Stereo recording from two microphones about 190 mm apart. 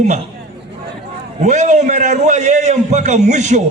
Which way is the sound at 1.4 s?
40° right (ahead or behind).